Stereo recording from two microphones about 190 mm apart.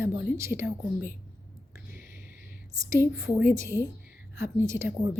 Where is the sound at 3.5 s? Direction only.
15° right (ahead or behind).